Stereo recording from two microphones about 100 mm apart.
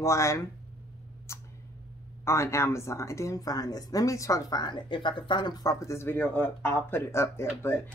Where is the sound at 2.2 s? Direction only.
30° left (ahead or behind).